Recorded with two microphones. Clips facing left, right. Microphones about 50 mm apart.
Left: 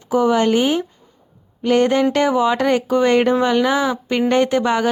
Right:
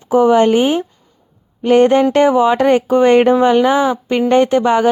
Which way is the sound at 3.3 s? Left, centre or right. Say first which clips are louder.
Right 5 dB; centre.